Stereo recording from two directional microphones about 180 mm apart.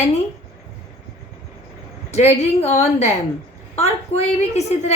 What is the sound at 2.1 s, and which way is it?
A woman's voice, 35° left (ahead or behind).